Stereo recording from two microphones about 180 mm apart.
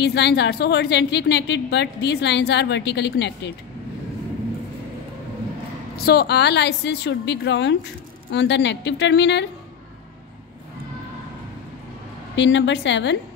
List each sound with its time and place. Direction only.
0.0 s a woman's voice: 65° left (ahead or behind)
5.9 s a woman's voice: 60° left (ahead or behind)
12.4 s a woman's voice: 90° left